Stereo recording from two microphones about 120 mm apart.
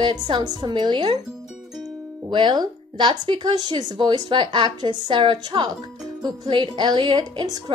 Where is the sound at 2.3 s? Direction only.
40° right (ahead or behind).